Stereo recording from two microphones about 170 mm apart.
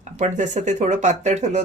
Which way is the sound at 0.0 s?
45° right (ahead or behind).